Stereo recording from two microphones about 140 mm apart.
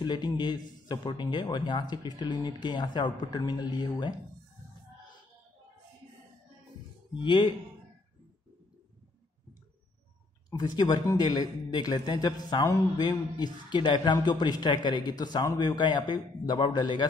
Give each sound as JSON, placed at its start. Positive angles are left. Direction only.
{"t": 0.0, "sound": "speech", "side_deg": 30}
{"t": 10.6, "sound": "speech", "side_deg": 30}